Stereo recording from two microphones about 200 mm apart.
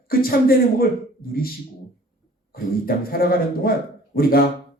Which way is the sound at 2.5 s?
50° left (ahead or behind).